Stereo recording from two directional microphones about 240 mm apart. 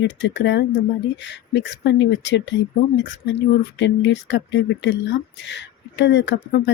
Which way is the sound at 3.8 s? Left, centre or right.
Left.